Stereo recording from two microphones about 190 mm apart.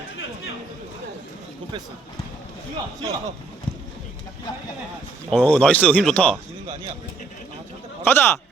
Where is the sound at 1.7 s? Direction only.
25° right (ahead or behind).